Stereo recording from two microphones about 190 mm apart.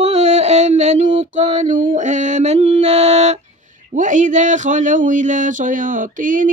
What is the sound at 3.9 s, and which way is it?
Speech, 40° right (ahead or behind).